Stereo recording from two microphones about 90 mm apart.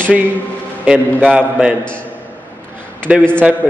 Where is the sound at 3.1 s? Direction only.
15° right (ahead or behind).